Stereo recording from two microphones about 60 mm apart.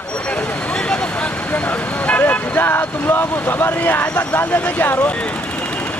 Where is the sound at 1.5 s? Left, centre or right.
Left.